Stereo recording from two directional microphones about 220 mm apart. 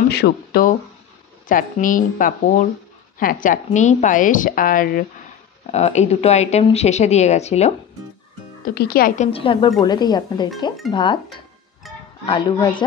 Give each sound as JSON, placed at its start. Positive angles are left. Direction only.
{"t": 0.1, "sound": "a woman's voice", "side_deg": 45}
{"t": 8.6, "sound": "speech", "side_deg": 45}
{"t": 11.8, "sound": "music", "side_deg": 0}
{"t": 12.3, "sound": "speech", "side_deg": 20}